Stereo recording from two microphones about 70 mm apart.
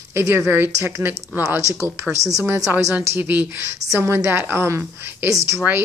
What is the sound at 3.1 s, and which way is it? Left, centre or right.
A woman's voice, right.